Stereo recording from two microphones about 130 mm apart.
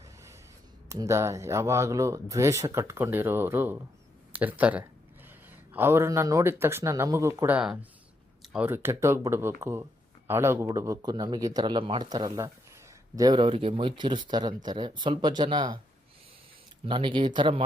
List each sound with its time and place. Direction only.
0.9 s speech: 25° right (ahead or behind)
13.4 s speech: 45° right (ahead or behind)
16.8 s speech: 40° right (ahead or behind)